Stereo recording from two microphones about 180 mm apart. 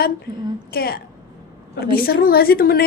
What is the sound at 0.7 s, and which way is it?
Speech, 60° left (ahead or behind).